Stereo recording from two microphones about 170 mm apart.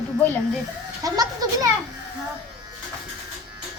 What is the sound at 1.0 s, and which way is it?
Children playing, 20° right (ahead or behind).